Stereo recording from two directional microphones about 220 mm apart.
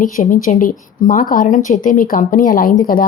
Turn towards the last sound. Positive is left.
turn(degrees=40)  # may be behind; listen again after turning